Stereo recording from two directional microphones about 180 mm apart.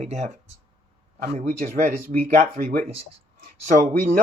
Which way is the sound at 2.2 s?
40° right (ahead or behind).